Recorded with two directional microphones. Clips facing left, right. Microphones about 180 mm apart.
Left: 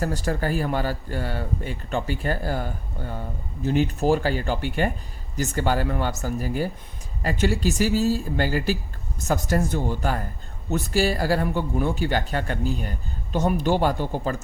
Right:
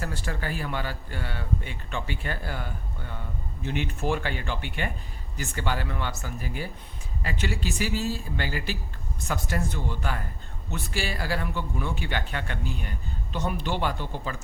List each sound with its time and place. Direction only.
0.0 s speech: 40° left (ahead or behind)